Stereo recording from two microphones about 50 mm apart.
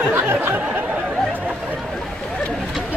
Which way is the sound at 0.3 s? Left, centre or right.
Right.